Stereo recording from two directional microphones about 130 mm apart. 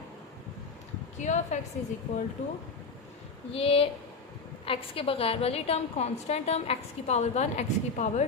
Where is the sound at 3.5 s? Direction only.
45° left (ahead or behind).